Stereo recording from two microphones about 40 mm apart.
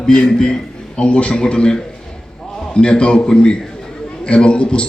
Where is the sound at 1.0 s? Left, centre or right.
Left.